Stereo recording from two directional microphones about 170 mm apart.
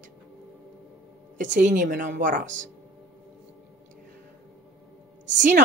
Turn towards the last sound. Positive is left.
turn(degrees=-50)  # may be behind; listen again after turning